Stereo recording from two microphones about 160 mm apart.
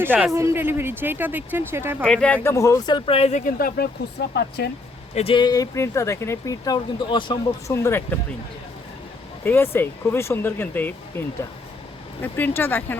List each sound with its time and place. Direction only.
0.0 s speech: 10° right (ahead or behind)
2.0 s speech: 5° left (ahead or behind); by 3.5 s 45° left (ahead or behind)
4.4 s speech: 90° left
5.1 s speech: 35° left (ahead or behind)
7.7 s speech: 15° left (ahead or behind)
9.4 s speech: 15° left (ahead or behind)